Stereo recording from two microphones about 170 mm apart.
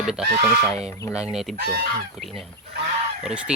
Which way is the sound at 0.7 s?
40° right (ahead or behind).